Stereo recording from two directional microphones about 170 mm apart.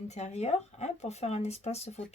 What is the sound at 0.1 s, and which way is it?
A woman's voice, 40° left (ahead or behind).